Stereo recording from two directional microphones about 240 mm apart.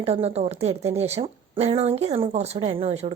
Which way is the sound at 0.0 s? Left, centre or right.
Right.